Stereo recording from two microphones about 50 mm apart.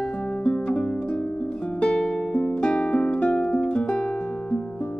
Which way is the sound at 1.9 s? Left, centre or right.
Centre.